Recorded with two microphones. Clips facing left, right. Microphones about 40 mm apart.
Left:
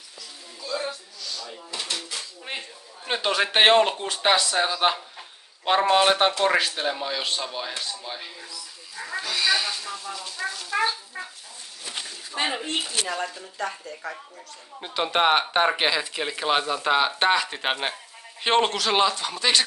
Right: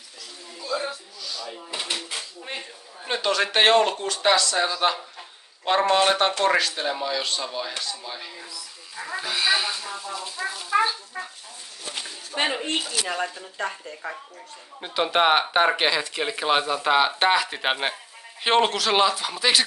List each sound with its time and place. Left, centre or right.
0.6 s a sound: centre
1.7 s dishes: right
3.1 s a man's voice: centre
8.9 s speech: centre
12.3 s speech: centre
13.1 s speech: right
14.8 s speech: centre